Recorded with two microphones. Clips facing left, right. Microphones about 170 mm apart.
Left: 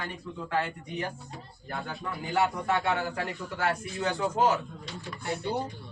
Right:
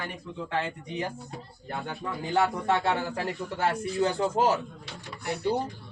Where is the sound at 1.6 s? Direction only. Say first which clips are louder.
Right 2 dB; 25° right (ahead or behind).